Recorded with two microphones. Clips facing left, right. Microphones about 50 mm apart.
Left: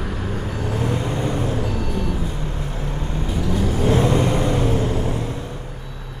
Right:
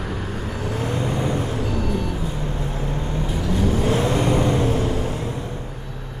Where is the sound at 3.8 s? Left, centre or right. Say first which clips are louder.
Left 6 dB; left.